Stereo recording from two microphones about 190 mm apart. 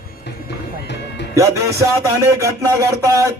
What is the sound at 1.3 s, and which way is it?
A man's voice, 15° right (ahead or behind).